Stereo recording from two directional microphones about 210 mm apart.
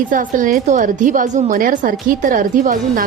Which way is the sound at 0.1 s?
40° right (ahead or behind).